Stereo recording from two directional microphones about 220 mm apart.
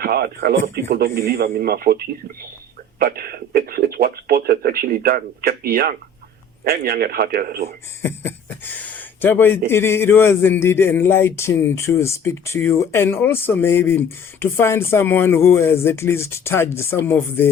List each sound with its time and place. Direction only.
0.0 s speech: 45° right (ahead or behind)
8.0 s speech: 10° left (ahead or behind)